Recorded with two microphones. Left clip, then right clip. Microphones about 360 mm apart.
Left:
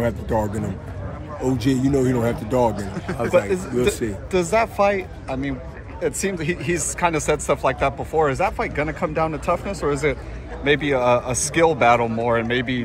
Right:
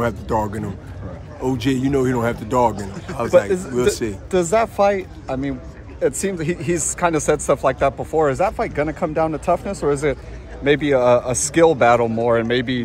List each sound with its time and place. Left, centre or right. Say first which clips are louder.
0.0 s speech: right 2 dB; centre
1.4 s speech: right 1 dB; centre
2.0 s speech: right 1 dB; centre
2.5 s speech: right 3 dB; centre
3.3 s speech: right 4 dB; right